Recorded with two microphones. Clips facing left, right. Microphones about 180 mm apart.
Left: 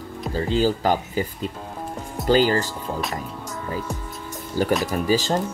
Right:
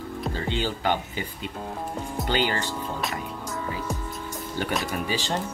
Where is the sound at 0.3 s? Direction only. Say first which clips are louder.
Left 9 dB; 40° left (ahead or behind).